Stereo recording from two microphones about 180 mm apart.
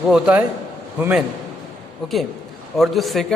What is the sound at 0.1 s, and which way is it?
A man's voice, 5° right (ahead or behind).